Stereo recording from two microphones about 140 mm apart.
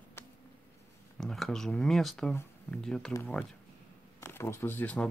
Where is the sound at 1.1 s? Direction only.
5° left (ahead or behind).